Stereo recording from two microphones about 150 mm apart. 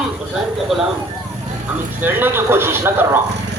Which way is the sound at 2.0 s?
15° right (ahead or behind).